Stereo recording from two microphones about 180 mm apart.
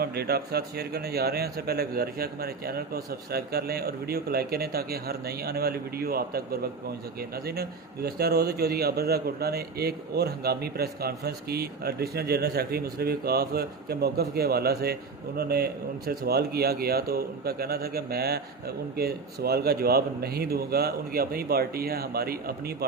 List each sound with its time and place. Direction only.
0.0 s a man's voice: 65° right (ahead or behind)